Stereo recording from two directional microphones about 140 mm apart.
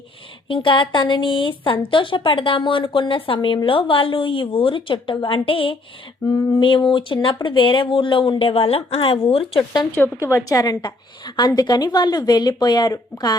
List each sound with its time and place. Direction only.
0.4 s a woman's voice: 40° left (ahead or behind)
6.2 s speech: 25° left (ahead or behind)
6.6 s a woman's voice: 40° left (ahead or behind)
9.9 s speech: 20° left (ahead or behind)